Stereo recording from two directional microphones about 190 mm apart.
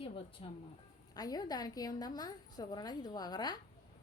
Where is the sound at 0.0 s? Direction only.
25° left (ahead or behind).